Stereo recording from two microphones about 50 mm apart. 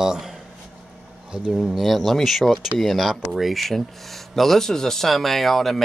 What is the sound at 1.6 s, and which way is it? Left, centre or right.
Speech, centre.